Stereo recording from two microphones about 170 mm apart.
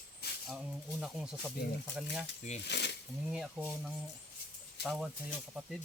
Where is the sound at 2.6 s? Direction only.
90° left.